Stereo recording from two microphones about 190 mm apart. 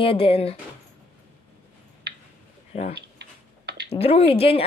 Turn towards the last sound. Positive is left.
turn(degrees=30)  # may be behind; listen again after turning